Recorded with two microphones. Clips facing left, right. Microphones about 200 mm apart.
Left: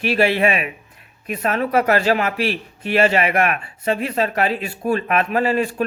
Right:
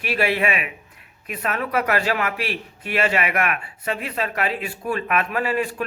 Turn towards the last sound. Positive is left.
turn(degrees=30)  # may be behind; listen again after turning